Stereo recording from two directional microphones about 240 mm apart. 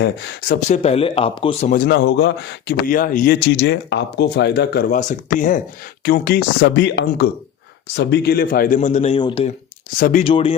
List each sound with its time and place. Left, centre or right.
0.0 s speech: left
1.7 s a man's voice: left
10.0 s speech: left